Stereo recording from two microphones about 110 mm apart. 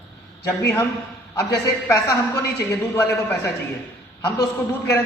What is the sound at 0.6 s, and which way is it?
Speech, 25° left (ahead or behind).